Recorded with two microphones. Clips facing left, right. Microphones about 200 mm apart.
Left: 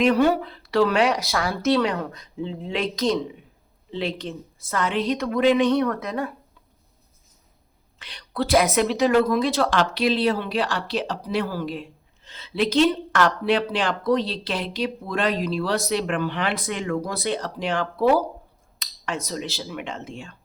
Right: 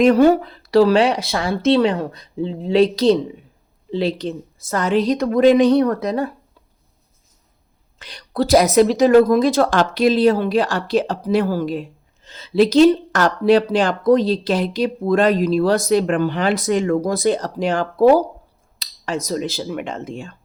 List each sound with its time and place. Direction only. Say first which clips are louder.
0.0 s speech: right 6 dB; 40° right (ahead or behind)
7.9 s a woman's voice: right 6 dB; 40° right (ahead or behind)